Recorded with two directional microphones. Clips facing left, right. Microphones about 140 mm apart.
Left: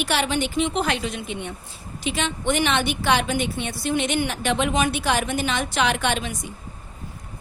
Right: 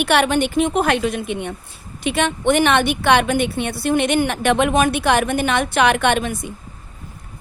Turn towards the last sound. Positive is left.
turn(degrees=-55)  # may be behind; listen again after turning